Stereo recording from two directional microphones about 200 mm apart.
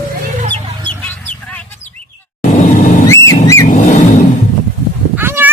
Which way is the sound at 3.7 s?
40° left (ahead or behind).